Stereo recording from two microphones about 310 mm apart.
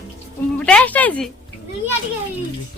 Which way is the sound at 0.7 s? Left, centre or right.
Centre.